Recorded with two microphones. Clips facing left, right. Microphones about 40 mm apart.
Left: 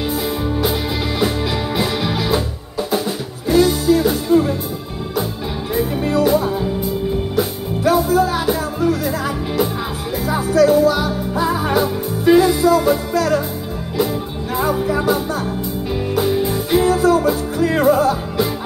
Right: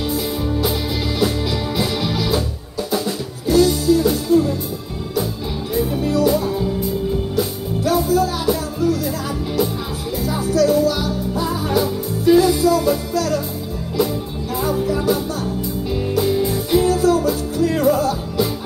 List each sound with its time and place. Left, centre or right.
0.1 s music: left
5.8 s music: left